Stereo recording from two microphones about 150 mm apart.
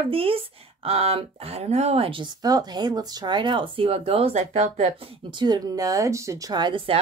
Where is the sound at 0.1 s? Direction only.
40° right (ahead or behind).